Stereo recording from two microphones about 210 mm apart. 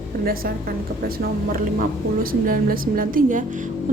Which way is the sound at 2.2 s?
40° right (ahead or behind).